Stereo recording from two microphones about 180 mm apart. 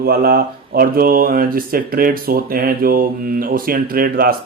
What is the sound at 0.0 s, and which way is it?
Speech, 55° right (ahead or behind).